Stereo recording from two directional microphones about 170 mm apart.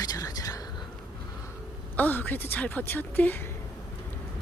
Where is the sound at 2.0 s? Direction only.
10° left (ahead or behind).